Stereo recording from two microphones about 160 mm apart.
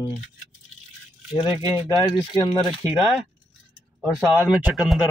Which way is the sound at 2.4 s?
30° left (ahead or behind).